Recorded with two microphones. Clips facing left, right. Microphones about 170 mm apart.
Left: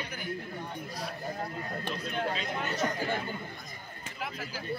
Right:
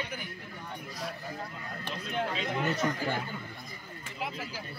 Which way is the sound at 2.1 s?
20° right (ahead or behind).